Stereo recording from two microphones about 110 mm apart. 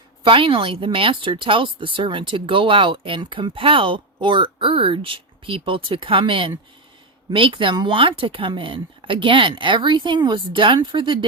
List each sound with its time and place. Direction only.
0.3 s speech: 55° right (ahead or behind)